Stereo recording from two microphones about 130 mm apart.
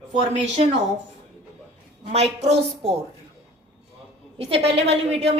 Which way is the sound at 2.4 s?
50° right (ahead or behind).